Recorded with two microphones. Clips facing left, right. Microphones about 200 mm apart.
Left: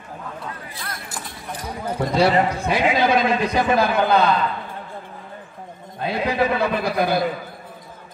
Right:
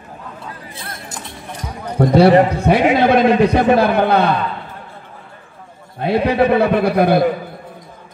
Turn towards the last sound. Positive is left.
turn(degrees=-60)  # may be behind; listen again after turning